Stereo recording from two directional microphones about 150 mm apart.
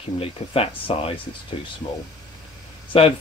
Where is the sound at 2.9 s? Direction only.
40° left (ahead or behind).